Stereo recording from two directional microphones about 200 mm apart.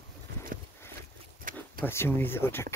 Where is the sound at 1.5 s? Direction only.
45° right (ahead or behind).